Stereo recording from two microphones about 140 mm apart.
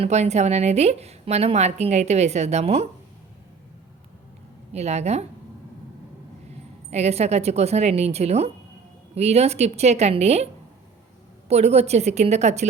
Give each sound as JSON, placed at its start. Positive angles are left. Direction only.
{"t": 0.0, "sound": "a woman's voice", "side_deg": -50}
{"t": 4.7, "sound": "a woman's voice", "side_deg": -50}
{"t": 6.9, "sound": "a woman's voice", "side_deg": -50}